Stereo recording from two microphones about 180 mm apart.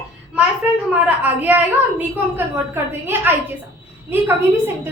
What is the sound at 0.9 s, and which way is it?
A woman's voice, 10° right (ahead or behind).